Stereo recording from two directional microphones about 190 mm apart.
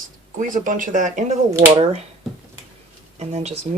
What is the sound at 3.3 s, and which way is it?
Speech, 35° right (ahead or behind).